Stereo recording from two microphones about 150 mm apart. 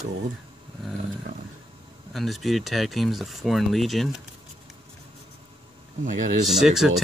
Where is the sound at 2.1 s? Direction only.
Centre (ahead or behind).